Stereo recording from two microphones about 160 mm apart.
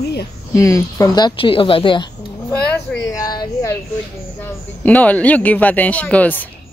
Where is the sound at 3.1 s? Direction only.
25° left (ahead or behind).